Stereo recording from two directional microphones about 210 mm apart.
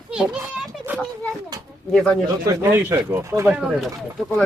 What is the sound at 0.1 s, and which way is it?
Children playing, 5° right (ahead or behind).